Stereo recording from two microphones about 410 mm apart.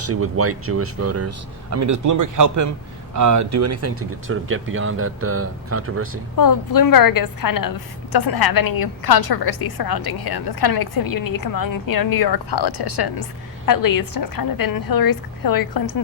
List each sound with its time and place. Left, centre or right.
0.0 s a man's voice: right
6.3 s a woman's voice: left
13.7 s a woman's voice: left